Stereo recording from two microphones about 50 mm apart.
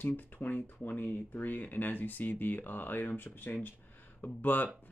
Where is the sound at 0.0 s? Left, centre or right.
Left.